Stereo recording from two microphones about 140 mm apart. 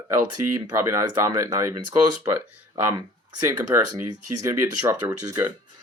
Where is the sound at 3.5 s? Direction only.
25° right (ahead or behind).